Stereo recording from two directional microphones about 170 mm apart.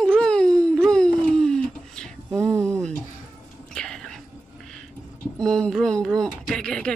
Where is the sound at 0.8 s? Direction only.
5° left (ahead or behind).